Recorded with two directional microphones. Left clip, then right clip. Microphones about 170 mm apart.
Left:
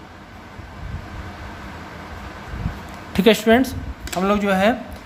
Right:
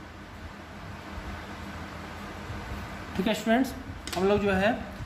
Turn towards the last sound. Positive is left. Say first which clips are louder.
# left 7 dB
turn(degrees=40)  # may be behind; listen again after turning